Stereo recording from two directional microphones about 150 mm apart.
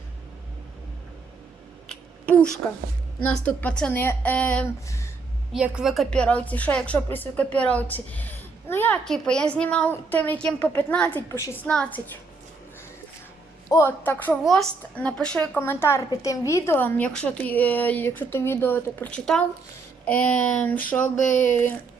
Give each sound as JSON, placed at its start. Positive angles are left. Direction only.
{"t": 1.9, "sound": "a sound", "side_deg": 5}
{"t": 3.2, "sound": "a woman's voice", "side_deg": 10}
{"t": 5.5, "sound": "a woman's voice", "side_deg": -5}
{"t": 11.3, "sound": "a woman's voice", "side_deg": 20}
{"t": 11.6, "sound": "a woman's voice", "side_deg": 10}
{"t": 13.7, "sound": "a woman's voice", "side_deg": 20}
{"t": 21.2, "sound": "speech", "side_deg": 55}
{"t": 21.5, "sound": "a woman's voice", "side_deg": 10}